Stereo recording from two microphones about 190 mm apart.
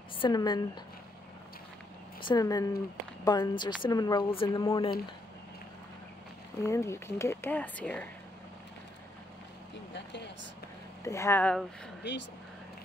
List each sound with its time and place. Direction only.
0.2 s speech: 20° left (ahead or behind)
2.2 s speech: 20° left (ahead or behind)
6.6 s speech: 15° left (ahead or behind)
9.9 s speech: 65° left (ahead or behind)
11.1 s speech: 15° left (ahead or behind)
12.0 s speech: 65° left (ahead or behind)